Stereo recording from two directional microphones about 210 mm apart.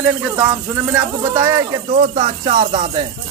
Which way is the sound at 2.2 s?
30° right (ahead or behind).